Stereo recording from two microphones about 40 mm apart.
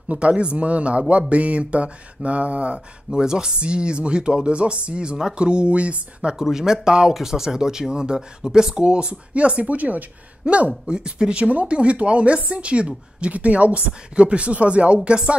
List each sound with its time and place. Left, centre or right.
0.1 s a woman's voice: right
3.1 s speech: centre
6.3 s speech: centre; by 10.0 s right
10.4 s a woman's voice: right
10.9 s speech: centre
11.3 s a woman's voice: right